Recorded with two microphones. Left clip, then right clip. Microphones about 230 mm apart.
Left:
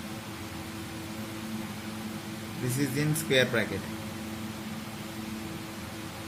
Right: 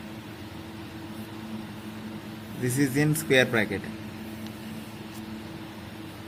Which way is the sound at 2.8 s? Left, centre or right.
Right.